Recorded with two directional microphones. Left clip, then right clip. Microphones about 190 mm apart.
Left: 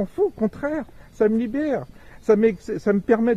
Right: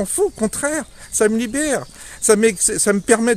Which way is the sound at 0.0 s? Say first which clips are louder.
Right 3 dB; 20° right (ahead or behind).